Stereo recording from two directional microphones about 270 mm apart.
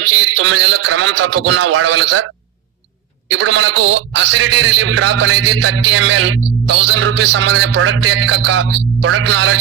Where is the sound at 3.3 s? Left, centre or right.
Right.